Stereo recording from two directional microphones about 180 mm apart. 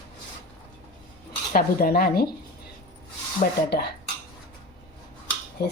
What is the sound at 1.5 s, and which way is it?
Speech, 55° left (ahead or behind).